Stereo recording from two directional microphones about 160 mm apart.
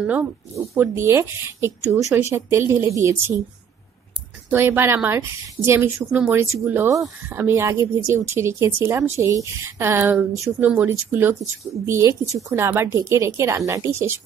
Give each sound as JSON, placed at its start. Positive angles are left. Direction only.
{"t": 0.0, "sound": "speech", "side_deg": -10}
{"t": 4.5, "sound": "speech", "side_deg": -15}